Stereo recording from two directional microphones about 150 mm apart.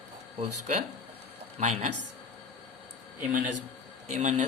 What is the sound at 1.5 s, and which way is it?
Speech, 50° right (ahead or behind).